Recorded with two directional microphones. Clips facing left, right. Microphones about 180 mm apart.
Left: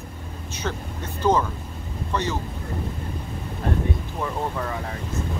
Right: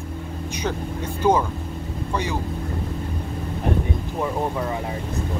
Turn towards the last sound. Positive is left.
turn(degrees=-15)  # may be behind; listen again after turning